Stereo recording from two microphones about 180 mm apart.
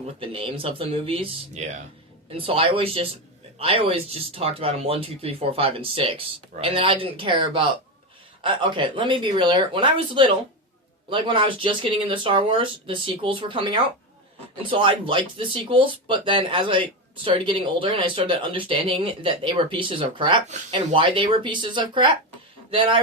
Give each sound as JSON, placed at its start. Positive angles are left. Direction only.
{"t": 0.2, "sound": "speech", "side_deg": -30}
{"t": 8.6, "sound": "speech", "side_deg": -25}